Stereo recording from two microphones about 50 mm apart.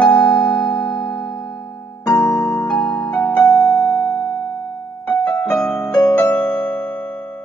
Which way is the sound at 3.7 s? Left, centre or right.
Left.